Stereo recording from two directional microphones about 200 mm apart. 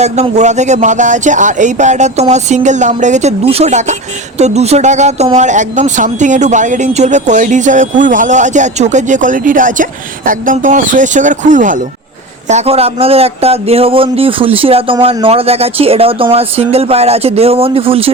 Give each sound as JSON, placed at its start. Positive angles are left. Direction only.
{"t": 0.0, "sound": "speech", "side_deg": -35}